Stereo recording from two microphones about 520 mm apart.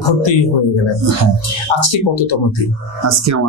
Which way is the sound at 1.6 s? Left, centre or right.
Left.